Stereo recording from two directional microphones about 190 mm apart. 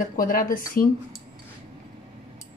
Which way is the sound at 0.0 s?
45° left (ahead or behind).